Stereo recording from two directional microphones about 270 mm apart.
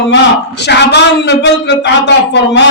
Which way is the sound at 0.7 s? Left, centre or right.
Left.